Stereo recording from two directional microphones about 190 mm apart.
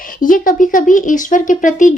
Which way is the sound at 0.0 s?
45° left (ahead or behind).